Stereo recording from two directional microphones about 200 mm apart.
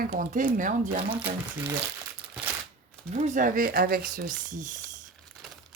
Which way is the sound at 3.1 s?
35° right (ahead or behind).